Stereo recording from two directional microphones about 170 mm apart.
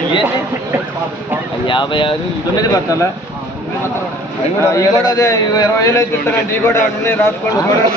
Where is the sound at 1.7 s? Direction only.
30° left (ahead or behind).